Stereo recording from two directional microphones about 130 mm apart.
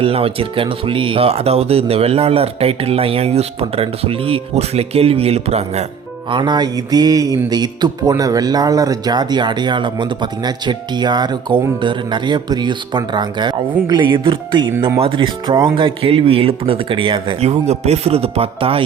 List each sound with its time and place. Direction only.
0.0 s speech: 45° right (ahead or behind)
6.3 s speech: 35° right (ahead or behind)